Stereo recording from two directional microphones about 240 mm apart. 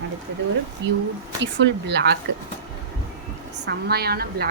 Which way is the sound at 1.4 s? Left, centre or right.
Right.